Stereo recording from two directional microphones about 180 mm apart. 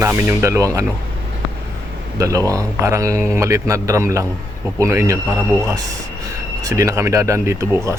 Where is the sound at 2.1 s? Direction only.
20° right (ahead or behind).